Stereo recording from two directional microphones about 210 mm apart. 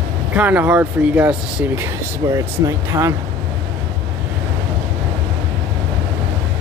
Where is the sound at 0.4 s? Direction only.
5° right (ahead or behind).